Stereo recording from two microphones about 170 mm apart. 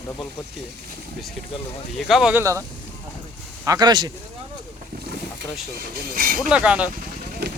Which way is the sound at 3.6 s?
20° right (ahead or behind).